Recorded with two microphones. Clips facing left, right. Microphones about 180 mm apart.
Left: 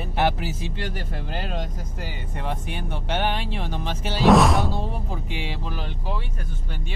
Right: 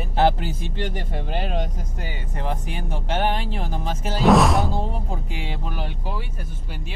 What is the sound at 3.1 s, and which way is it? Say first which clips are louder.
Speech: right 2 dB; 45° right (ahead or behind).